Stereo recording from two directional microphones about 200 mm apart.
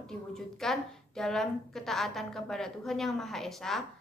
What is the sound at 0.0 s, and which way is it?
A woman's voice, centre (ahead or behind).